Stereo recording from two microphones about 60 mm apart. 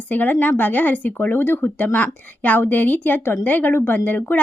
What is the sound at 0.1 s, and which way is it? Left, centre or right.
A woman's voice, left.